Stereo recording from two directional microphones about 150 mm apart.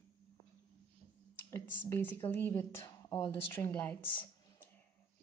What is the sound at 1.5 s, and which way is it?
A woman's voice, 15° left (ahead or behind).